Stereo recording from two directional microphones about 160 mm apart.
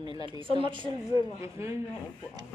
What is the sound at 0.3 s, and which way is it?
Speech, 30° right (ahead or behind).